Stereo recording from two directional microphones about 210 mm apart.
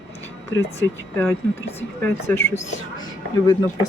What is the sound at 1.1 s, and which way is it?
Speech, 10° left (ahead or behind).